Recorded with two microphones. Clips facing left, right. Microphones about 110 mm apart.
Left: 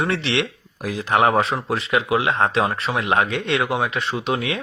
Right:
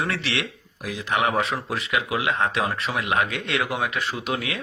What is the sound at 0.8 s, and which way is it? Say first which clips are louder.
Speech: left 6 dB; 40° left (ahead or behind).